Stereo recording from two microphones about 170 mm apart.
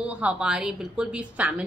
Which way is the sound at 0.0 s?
5° right (ahead or behind).